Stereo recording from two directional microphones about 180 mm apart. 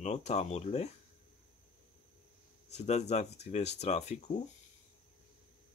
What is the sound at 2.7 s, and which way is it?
Speech, 40° left (ahead or behind).